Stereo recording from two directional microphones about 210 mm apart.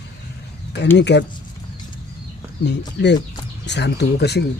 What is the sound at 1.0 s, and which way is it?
Speech, 55° left (ahead or behind).